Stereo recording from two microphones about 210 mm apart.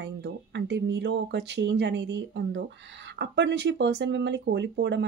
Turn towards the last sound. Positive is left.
turn(degrees=-55)  # may be behind; listen again after turning